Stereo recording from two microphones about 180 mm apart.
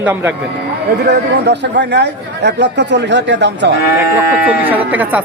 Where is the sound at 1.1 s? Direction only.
70° right (ahead or behind).